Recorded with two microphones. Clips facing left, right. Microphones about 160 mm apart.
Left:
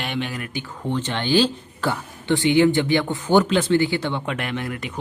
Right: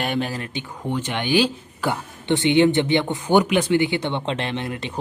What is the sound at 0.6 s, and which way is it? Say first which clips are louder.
Speech: left 2 dB; 15° right (ahead or behind).